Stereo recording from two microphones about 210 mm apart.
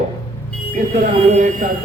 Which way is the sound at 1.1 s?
35° right (ahead or behind).